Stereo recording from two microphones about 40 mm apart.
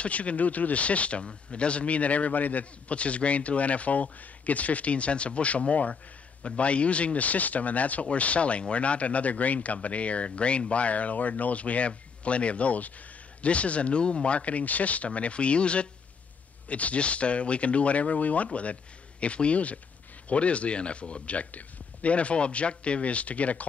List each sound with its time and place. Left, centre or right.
0.0 s speech: left